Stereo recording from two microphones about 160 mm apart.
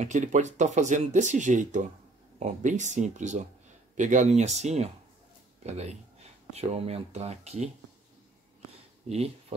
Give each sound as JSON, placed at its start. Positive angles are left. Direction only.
{"t": 0.0, "sound": "speech", "side_deg": -50}